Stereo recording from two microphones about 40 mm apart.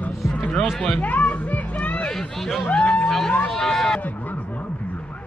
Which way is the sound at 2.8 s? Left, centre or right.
Left.